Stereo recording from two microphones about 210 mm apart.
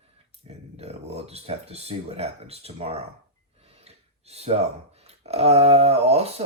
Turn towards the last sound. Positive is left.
turn(degrees=-30)  # may be behind; listen again after turning